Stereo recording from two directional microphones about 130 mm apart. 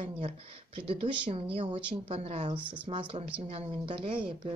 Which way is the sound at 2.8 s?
40° right (ahead or behind).